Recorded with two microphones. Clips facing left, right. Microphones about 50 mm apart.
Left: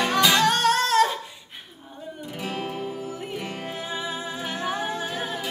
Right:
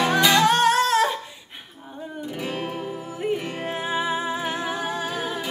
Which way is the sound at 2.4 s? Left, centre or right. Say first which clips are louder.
Even; centre.